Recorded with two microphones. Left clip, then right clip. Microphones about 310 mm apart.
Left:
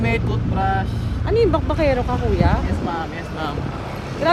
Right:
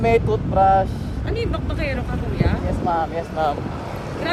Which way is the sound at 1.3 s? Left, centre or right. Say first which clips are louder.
Left 9 dB; centre.